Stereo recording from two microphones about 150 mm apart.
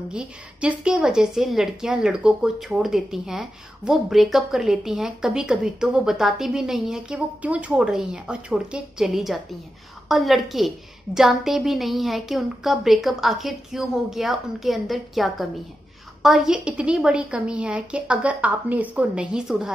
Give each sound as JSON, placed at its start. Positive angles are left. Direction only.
{"t": 0.1, "sound": "a woman's voice", "side_deg": -5}